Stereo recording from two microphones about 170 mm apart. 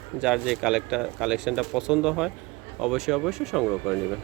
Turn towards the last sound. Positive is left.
turn(degrees=0)  # may be behind; listen again after turning